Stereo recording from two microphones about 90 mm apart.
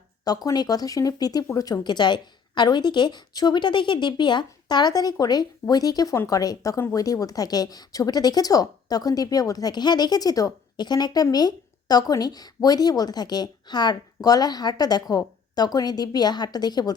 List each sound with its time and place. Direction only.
0.3 s speech: 45° left (ahead or behind)